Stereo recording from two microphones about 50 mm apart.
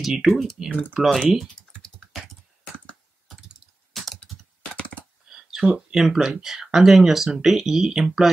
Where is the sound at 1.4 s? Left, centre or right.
Centre.